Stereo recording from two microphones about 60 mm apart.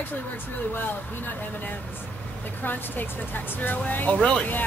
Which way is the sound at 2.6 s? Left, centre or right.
Left.